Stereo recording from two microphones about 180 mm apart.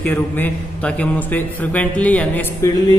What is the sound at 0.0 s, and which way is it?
A man's voice, 10° left (ahead or behind).